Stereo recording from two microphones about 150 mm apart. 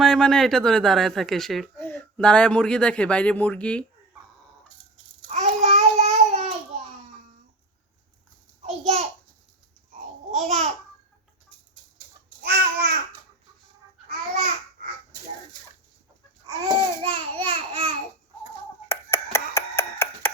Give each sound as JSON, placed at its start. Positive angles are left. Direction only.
{"t": 0.0, "sound": "speech", "side_deg": 5}
{"t": 5.3, "sound": "babbling", "side_deg": -50}
{"t": 8.6, "sound": "a child's voice", "side_deg": -45}
{"t": 9.9, "sound": "babbling", "side_deg": -50}
{"t": 12.4, "sound": "babbling", "side_deg": -90}
{"t": 16.5, "sound": "babbling", "side_deg": -30}
{"t": 18.9, "sound": "chopping", "side_deg": 20}